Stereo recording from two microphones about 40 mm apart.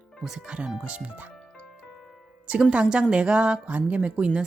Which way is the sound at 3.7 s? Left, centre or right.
Right.